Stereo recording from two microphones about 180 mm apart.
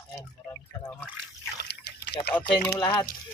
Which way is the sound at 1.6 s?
65° left (ahead or behind).